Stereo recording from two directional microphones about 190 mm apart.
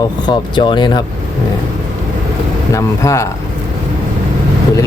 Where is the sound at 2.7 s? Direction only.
15° left (ahead or behind).